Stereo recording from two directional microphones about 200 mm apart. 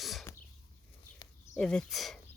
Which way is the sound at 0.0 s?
Centre (ahead or behind).